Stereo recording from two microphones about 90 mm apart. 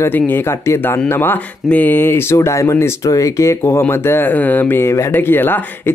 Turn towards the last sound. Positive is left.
turn(degrees=25)  # may be behind; listen again after turning